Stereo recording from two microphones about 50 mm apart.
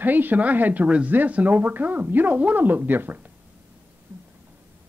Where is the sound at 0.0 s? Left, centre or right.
Right.